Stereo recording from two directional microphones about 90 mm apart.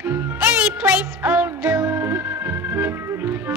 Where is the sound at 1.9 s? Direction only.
30° right (ahead or behind).